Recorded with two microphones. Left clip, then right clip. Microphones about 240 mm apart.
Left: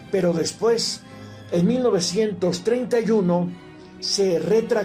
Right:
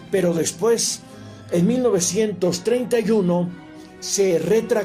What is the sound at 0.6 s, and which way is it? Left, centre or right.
Speech, right.